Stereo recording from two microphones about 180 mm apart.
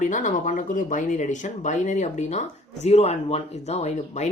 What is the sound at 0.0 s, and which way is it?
Speech, 45° left (ahead or behind).